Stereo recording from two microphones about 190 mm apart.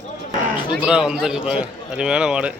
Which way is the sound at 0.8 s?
5° right (ahead or behind).